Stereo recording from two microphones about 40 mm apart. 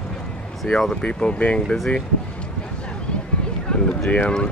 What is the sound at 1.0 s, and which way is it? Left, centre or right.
Speech, left.